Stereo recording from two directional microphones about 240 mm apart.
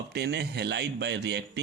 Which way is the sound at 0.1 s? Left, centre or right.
Right.